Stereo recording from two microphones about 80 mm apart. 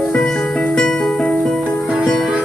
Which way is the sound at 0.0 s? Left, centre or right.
Centre.